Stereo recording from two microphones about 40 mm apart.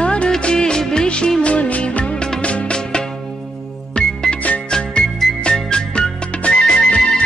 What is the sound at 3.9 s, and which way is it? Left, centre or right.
Music, left.